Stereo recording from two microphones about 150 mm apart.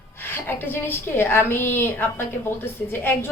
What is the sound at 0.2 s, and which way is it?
A woman's voice, 15° left (ahead or behind).